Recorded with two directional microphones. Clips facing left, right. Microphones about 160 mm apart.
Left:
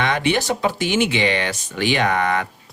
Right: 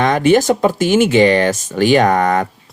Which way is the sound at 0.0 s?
45° right (ahead or behind).